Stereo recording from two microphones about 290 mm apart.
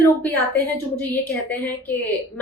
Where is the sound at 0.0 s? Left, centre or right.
Centre.